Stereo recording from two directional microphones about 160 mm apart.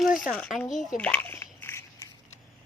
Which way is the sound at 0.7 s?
50° left (ahead or behind).